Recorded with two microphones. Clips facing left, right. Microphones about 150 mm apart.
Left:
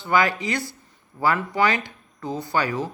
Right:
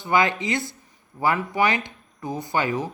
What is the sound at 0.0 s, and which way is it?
Speech, 20° right (ahead or behind).